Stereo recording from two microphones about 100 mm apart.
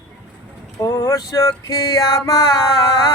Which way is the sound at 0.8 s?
35° left (ahead or behind).